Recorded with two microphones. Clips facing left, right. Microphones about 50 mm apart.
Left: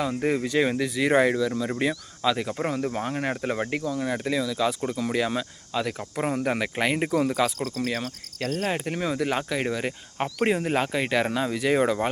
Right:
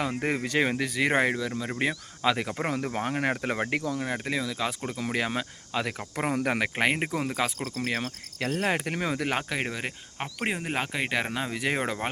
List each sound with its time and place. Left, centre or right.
0.0 s speech: right
1.1 s speech: right
2.2 s speech: right
4.0 s speech: right
6.7 s speech: right
7.0 s speech: right
8.4 s speech: right
8.7 s speech: right
9.6 s speech: centre
10.2 s speech: centre; by 11.9 s right